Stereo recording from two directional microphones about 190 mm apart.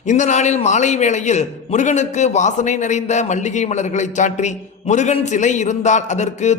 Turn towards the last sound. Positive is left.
turn(degrees=35)  # may be behind; listen again after turning